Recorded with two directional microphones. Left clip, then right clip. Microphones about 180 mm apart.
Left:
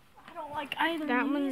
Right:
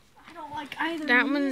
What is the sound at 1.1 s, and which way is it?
Speech, 20° right (ahead or behind).